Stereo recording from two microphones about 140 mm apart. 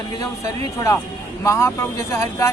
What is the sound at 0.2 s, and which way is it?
A man's voice, 25° left (ahead or behind).